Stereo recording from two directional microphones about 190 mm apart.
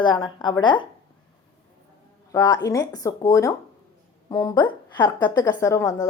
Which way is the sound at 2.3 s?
20° left (ahead or behind).